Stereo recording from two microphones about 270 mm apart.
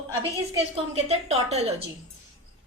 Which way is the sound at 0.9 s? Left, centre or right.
Right.